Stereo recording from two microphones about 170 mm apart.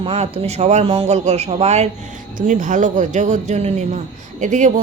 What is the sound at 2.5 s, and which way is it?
Speech, 45° right (ahead or behind).